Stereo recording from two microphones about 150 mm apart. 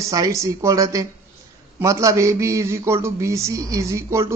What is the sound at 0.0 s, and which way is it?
A man's voice, 20° right (ahead or behind).